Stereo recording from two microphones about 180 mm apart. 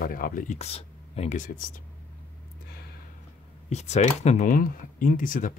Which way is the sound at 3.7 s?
40° left (ahead or behind).